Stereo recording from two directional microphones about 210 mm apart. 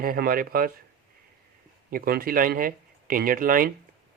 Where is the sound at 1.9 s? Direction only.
45° right (ahead or behind).